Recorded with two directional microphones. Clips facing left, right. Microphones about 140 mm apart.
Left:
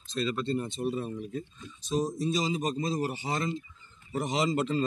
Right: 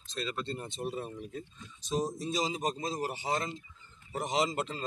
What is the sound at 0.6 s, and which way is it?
A man's voice, 20° right (ahead or behind).